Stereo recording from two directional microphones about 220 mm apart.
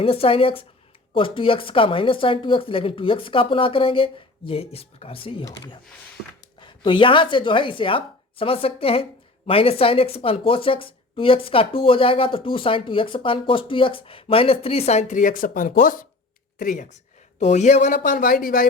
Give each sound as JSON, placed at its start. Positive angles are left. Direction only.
{"t": 0.0, "sound": "speech", "side_deg": 25}
{"t": 6.6, "sound": "speech", "side_deg": 20}